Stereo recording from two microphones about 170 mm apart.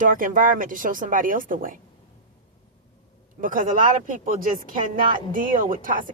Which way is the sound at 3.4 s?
55° right (ahead or behind).